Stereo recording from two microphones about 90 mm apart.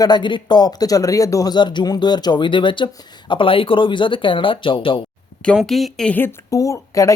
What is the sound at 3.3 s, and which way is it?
Speech, 75° left (ahead or behind).